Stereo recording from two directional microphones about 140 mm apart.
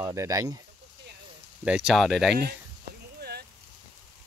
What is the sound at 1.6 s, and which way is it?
Speech, 5° right (ahead or behind).